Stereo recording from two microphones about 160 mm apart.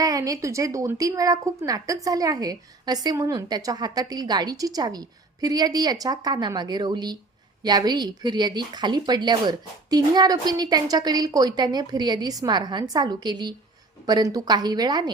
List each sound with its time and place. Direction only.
0.0 s a woman's voice: 20° right (ahead or behind)